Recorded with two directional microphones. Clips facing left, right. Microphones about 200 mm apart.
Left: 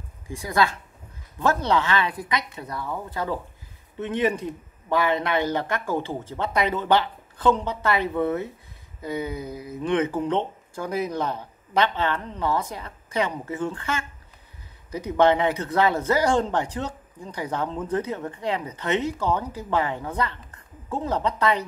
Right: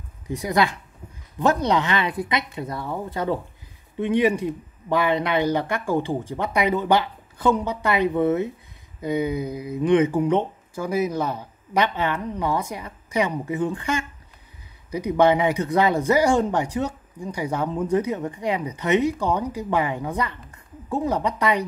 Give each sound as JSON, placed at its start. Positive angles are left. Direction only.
{"t": 0.3, "sound": "speech", "side_deg": -20}
{"t": 4.0, "sound": "speech", "side_deg": -10}